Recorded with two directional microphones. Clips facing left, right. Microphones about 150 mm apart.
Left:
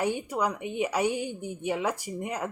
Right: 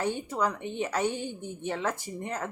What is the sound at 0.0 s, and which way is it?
Speech, 10° left (ahead or behind).